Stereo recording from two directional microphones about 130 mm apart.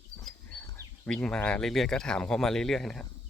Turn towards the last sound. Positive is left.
turn(degrees=5)  # may be behind; listen again after turning